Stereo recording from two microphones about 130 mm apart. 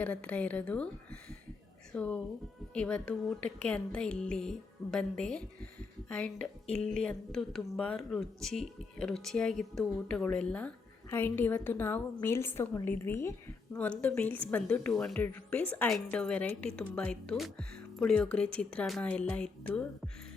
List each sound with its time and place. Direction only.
0.0 s a woman's voice: 10° left (ahead or behind)
2.0 s a woman's voice: 10° left (ahead or behind)